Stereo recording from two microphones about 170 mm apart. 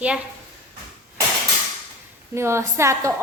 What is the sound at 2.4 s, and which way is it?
Speech, 15° right (ahead or behind).